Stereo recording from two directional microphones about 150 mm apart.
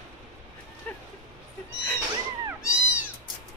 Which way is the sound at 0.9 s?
10° left (ahead or behind).